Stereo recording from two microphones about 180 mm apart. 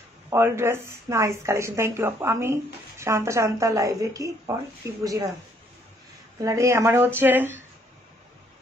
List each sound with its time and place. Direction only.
0.3 s speech: 15° right (ahead or behind)
6.4 s speech: 15° right (ahead or behind)